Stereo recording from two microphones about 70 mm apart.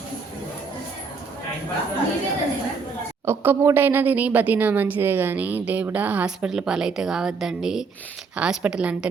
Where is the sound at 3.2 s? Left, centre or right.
Right; by 6.5 s centre.